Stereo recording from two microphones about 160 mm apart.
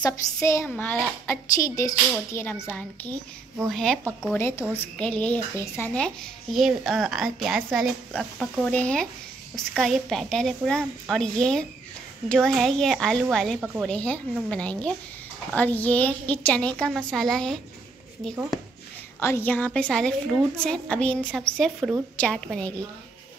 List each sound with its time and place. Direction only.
0.0 s a woman's voice: 20° left (ahead or behind)
4.3 s a woman's voice: 15° left (ahead or behind); by 13.8 s centre (ahead or behind)
13.8 s a woman's voice: 10° left (ahead or behind)
19.1 s a woman's voice: 15° left (ahead or behind)